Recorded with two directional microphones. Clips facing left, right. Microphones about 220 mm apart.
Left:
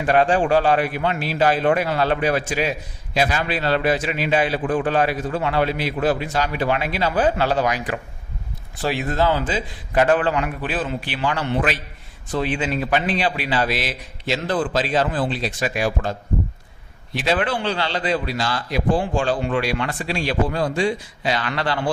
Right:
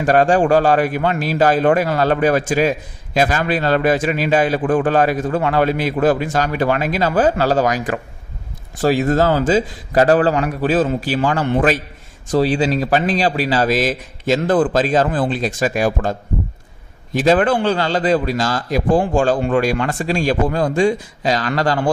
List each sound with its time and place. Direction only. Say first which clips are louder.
0.0 s a man's voice: right 4 dB; 45° right (ahead or behind)